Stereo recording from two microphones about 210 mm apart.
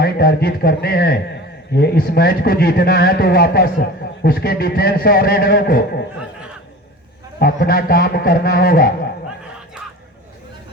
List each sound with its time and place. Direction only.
0.0 s a man's voice: 50° left (ahead or behind)
7.3 s a man's voice: 45° left (ahead or behind)